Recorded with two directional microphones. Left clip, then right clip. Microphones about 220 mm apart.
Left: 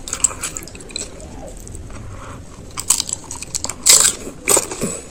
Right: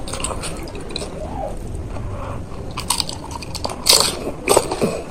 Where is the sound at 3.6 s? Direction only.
35° left (ahead or behind).